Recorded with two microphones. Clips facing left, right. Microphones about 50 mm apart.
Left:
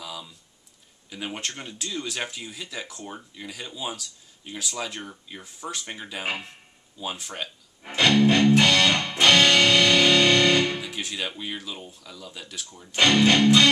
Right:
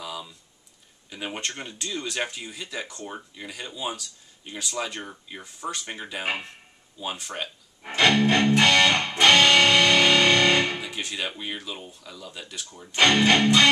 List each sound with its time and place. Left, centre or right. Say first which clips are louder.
0.0 s typing: right 2 dB; centre
1.1 s speech: right 1 dB; centre
8.0 s music: left 1 dB; centre
9.1 s music: right 1 dB; centre
9.4 s music: right 1 dB; centre
10.9 s speech: even; centre
13.0 s speech: even; centre